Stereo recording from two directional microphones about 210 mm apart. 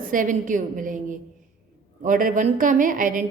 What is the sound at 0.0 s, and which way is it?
A woman's voice, 40° right (ahead or behind).